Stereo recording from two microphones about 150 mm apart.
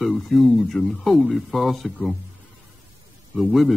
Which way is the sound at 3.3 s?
Centre (ahead or behind).